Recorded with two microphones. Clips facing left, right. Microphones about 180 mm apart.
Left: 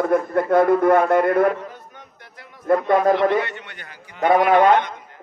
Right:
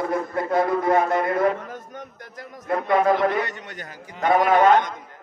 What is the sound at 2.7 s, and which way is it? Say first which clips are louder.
Speech: left 3 dB; 50° left (ahead or behind).